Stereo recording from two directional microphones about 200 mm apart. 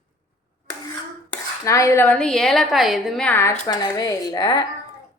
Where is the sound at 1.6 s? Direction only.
15° left (ahead or behind).